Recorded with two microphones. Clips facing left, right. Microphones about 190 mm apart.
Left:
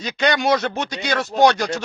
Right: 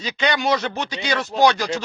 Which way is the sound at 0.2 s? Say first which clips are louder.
Left 3 dB; 50° left (ahead or behind).